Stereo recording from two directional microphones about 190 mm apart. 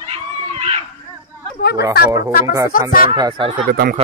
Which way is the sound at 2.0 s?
15° right (ahead or behind).